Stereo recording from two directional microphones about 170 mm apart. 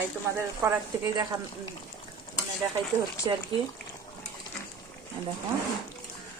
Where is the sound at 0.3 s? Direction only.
20° right (ahead or behind).